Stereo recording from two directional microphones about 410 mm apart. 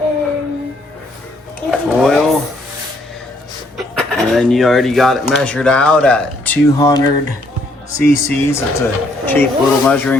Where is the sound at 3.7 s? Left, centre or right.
Centre.